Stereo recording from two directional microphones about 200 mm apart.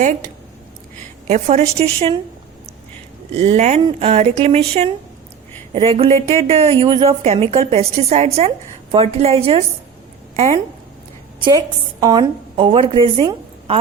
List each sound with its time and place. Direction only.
1.3 s a woman's voice: 35° right (ahead or behind)
3.3 s a woman's voice: 30° right (ahead or behind)